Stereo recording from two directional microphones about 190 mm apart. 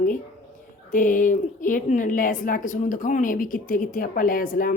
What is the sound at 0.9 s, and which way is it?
A woman's voice, 45° left (ahead or behind).